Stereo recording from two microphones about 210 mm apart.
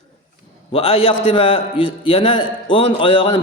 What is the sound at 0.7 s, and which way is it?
A man's voice, 25° left (ahead or behind).